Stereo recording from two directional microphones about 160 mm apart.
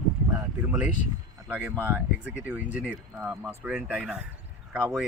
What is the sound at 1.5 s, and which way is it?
Speech, 10° right (ahead or behind).